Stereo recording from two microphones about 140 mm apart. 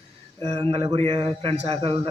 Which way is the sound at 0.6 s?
40° right (ahead or behind).